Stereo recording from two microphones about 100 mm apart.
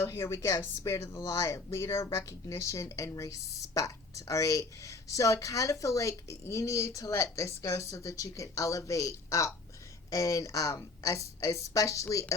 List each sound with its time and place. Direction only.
0.0 s speech: 30° left (ahead or behind)